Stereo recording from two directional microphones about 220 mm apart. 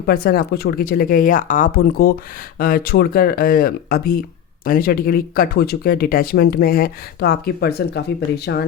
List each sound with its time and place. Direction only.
0.0 s speech: 45° left (ahead or behind)